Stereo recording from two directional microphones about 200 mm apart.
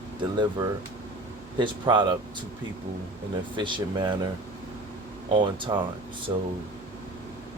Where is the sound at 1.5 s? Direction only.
25° right (ahead or behind).